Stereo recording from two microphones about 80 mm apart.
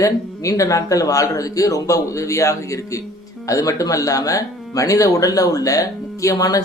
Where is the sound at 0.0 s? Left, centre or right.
Left.